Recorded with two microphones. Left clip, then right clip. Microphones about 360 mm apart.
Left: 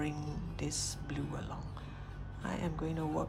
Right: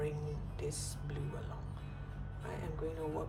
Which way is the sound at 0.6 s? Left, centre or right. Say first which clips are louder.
Left 4 dB; centre.